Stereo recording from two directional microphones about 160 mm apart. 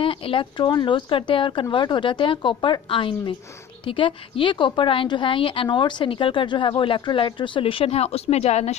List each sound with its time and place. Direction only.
0.0 s a woman's voice: 35° left (ahead or behind)